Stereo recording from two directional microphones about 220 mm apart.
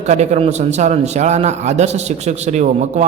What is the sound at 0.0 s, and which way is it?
A man's voice, 30° right (ahead or behind).